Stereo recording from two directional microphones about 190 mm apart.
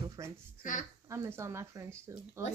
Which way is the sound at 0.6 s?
45° left (ahead or behind).